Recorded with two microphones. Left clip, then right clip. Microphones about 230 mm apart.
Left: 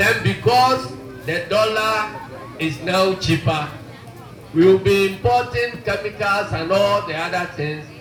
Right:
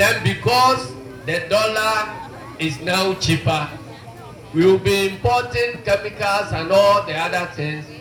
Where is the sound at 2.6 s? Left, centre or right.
Right.